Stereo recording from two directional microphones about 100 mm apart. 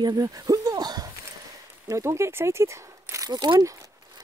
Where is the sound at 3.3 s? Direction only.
45° right (ahead or behind).